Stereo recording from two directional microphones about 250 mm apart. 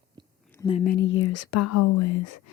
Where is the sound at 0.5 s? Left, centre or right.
Centre.